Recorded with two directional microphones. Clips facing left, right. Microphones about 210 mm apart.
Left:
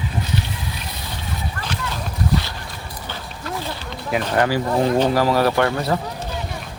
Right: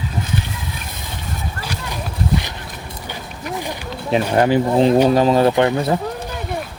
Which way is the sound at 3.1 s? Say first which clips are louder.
Right 2 dB; 15° right (ahead or behind).